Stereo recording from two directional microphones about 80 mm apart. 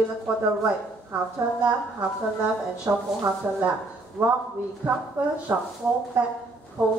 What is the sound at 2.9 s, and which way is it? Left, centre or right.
Speech, right.